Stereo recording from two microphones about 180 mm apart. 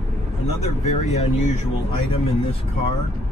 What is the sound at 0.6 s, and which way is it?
Speech, 35° left (ahead or behind).